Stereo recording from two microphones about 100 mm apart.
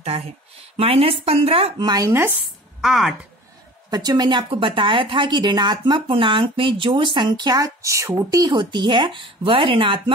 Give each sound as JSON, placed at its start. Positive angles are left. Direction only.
{"t": 0.7, "sound": "speech", "side_deg": -75}
{"t": 1.8, "sound": "speech", "side_deg": -45}
{"t": 2.0, "sound": "speech", "side_deg": -25}
{"t": 2.8, "sound": "a woman's voice", "side_deg": 0}
{"t": 3.9, "sound": "speech", "side_deg": -40}